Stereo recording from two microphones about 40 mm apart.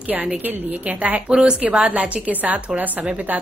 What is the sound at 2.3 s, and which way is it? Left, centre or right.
Speech, right.